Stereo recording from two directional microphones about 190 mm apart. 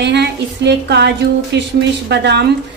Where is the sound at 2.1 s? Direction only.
65° right (ahead or behind).